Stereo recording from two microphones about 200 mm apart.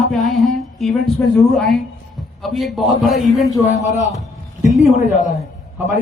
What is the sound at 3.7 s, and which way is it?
Speech, 35° left (ahead or behind).